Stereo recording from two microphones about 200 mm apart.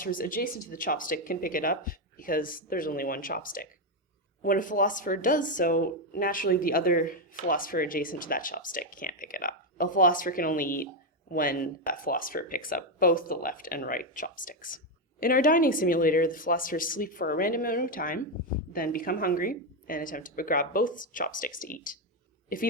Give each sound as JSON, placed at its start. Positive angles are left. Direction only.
{"t": 0.0, "sound": "speech", "side_deg": 45}